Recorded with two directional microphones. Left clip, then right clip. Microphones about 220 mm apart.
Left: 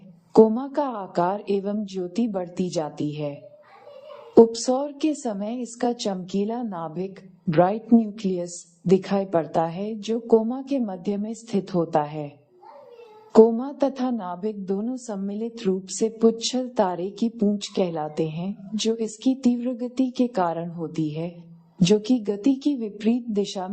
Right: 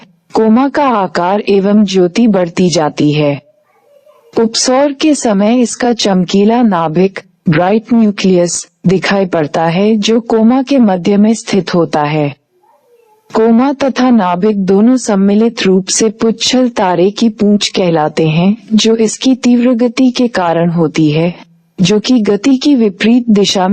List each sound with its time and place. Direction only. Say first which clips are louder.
0.3 s a woman's voice: right 8 dB; 45° right (ahead or behind)